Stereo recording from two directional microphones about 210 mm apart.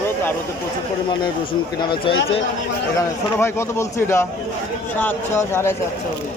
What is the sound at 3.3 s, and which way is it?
A man's voice, 10° left (ahead or behind).